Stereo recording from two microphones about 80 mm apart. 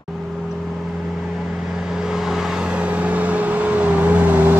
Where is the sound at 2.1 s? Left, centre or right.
Centre; by 4.5 s right.